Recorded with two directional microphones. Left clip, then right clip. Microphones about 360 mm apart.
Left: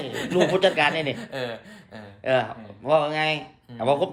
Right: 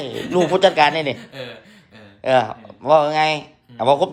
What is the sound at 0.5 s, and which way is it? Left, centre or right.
Speech, centre.